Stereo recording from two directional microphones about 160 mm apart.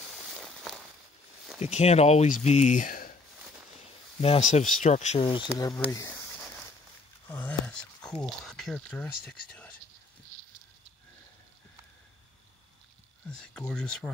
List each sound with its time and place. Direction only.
0.3 s a sound: centre (ahead or behind)
1.6 s speech: 45° left (ahead or behind)
4.2 s speech: 40° left (ahead or behind)
5.2 s speech: 30° left (ahead or behind)
7.2 s speech: 10° left (ahead or behind)
13.3 s speech: 5° left (ahead or behind)